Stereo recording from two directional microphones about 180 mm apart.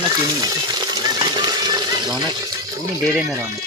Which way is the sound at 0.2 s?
20° right (ahead or behind).